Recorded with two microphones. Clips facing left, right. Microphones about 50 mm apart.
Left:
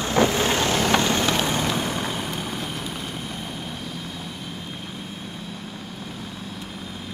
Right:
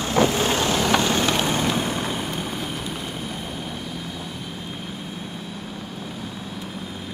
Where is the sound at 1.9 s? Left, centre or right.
Centre.